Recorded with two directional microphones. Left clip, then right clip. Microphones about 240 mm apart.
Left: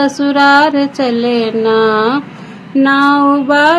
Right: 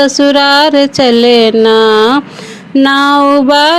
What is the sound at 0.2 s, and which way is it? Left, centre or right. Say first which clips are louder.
Music: even; right.